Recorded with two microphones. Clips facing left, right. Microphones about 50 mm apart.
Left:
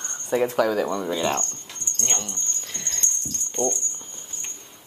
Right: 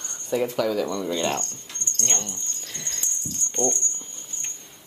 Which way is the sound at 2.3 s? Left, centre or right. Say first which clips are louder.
Left 2 dB; centre.